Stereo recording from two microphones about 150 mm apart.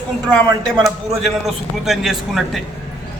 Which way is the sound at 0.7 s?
5° left (ahead or behind).